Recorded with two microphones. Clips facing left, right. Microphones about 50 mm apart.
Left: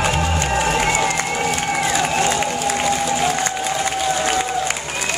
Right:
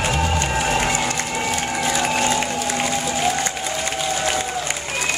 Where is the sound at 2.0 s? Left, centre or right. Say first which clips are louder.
Left 1 dB; centre.